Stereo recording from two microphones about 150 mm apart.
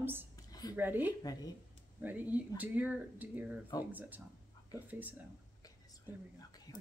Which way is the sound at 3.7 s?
25° left (ahead or behind).